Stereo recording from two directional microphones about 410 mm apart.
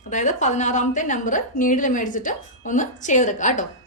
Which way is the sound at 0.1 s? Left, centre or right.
Centre.